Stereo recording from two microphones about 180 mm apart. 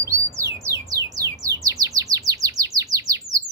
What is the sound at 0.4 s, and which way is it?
Bird, 20° right (ahead or behind).